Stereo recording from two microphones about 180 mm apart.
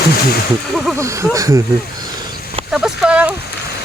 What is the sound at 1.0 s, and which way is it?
Speech, 20° right (ahead or behind).